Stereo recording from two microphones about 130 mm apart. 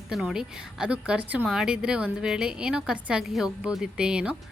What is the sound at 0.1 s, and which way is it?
A woman's voice, 5° right (ahead or behind).